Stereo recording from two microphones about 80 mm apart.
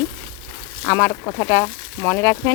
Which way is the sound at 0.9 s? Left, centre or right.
Left.